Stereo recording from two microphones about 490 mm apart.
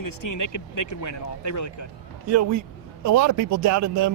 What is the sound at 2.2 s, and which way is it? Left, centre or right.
Speech, right.